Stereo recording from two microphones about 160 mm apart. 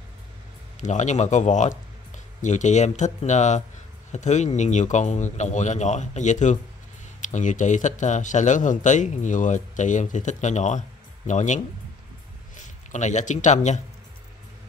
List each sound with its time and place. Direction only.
0.7 s speech: 50° left (ahead or behind)